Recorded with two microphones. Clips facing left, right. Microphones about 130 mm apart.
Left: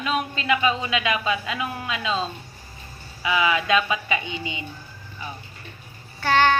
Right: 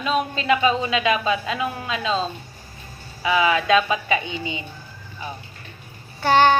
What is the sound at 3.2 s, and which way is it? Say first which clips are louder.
Speech: right 3 dB; 30° right (ahead or behind).